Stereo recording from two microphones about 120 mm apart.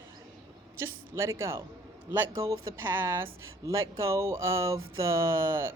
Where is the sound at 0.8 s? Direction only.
25° right (ahead or behind).